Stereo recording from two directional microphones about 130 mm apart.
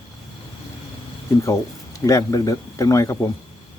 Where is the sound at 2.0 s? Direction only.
25° left (ahead or behind).